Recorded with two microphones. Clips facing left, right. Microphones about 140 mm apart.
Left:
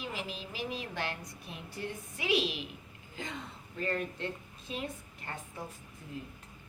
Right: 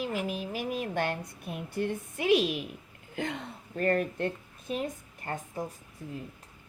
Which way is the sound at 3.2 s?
65° right (ahead or behind).